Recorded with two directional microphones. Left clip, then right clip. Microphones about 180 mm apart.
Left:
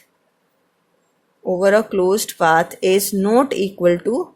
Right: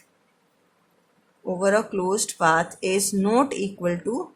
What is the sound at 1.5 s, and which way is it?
A woman's voice, 25° left (ahead or behind).